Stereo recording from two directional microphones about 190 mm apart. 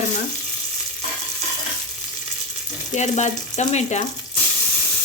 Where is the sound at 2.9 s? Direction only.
40° left (ahead or behind).